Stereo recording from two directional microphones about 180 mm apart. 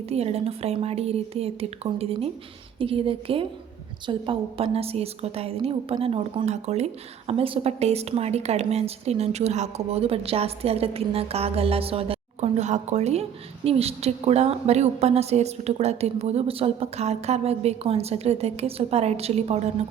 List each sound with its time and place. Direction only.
0.1 s a woman's voice: 35° right (ahead or behind)